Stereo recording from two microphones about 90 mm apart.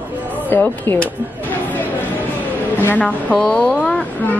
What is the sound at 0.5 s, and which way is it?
Speech, 20° left (ahead or behind).